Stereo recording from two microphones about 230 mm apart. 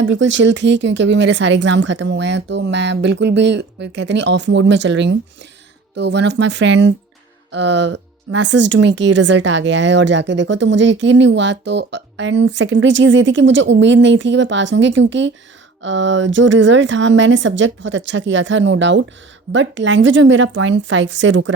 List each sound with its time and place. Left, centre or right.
0.0 s speech: right